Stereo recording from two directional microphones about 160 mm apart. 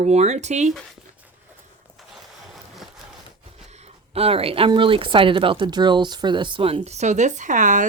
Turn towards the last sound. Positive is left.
turn(degrees=-50)  # may be behind; listen again after turning